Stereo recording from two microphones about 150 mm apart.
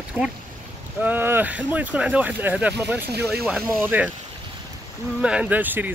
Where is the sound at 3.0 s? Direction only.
90° right.